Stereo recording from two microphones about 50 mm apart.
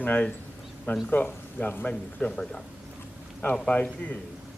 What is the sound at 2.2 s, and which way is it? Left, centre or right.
Speech, centre.